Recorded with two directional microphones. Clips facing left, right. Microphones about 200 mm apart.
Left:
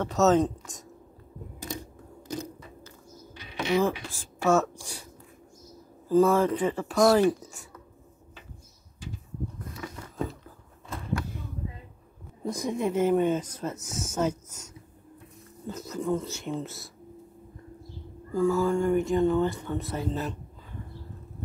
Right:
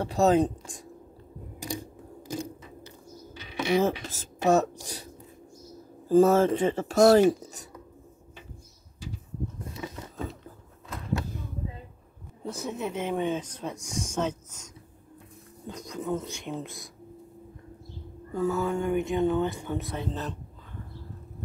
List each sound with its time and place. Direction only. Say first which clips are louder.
0.1 s speech: even; 10° right (ahead or behind)
3.5 s mechanisms: right 1 dB; 20° right (ahead or behind)
4.4 s speech: right 1 dB; 20° right (ahead or behind)
4.7 s speech: right 3 dB; 40° right (ahead or behind)
6.0 s speech: right 2 dB; 45° right (ahead or behind)
6.3 s speech: right 2 dB; 25° right (ahead or behind)
6.9 s speech: right 3 dB; 45° right (ahead or behind)
9.6 s a sound: right 2 dB; 20° right (ahead or behind)
12.4 s speech: left 4 dB; 10° left (ahead or behind)
18.3 s speech: left 3 dB; 5° right (ahead or behind)
19.8 s speech: left 2 dB; 5° left (ahead or behind)